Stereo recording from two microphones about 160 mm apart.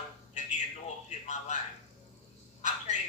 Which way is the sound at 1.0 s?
45° left (ahead or behind).